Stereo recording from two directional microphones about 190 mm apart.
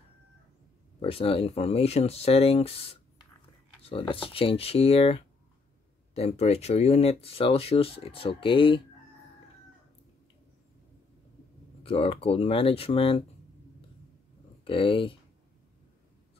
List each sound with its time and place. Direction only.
1.0 s speech: 30° left (ahead or behind)
11.8 s speech: 30° left (ahead or behind)
14.6 s speech: 25° left (ahead or behind)